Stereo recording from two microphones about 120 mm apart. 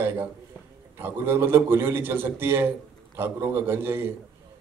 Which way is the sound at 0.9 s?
20° right (ahead or behind).